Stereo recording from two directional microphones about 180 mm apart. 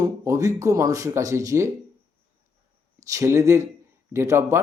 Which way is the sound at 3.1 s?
15° right (ahead or behind).